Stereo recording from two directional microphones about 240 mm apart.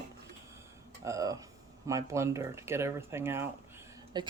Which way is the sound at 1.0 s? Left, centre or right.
Centre.